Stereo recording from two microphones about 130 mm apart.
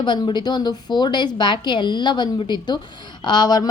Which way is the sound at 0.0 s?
35° left (ahead or behind).